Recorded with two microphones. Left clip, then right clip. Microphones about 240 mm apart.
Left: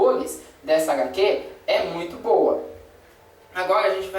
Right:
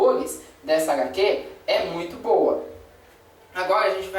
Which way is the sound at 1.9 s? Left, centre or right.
Left.